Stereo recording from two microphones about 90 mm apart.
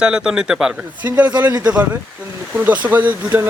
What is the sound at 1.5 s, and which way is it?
Speech, 45° right (ahead or behind).